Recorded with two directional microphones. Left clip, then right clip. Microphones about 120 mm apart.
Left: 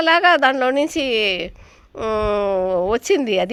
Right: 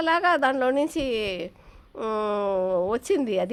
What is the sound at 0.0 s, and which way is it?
A woman's voice, 30° left (ahead or behind).